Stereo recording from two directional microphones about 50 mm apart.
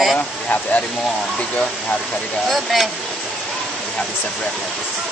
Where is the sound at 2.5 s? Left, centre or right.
Centre.